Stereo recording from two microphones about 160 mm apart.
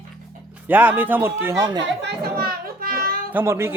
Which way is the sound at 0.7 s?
10° right (ahead or behind).